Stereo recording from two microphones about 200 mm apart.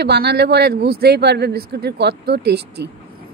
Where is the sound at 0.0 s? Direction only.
55° right (ahead or behind).